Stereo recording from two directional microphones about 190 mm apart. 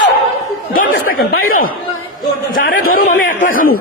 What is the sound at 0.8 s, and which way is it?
A man's voice, 50° left (ahead or behind).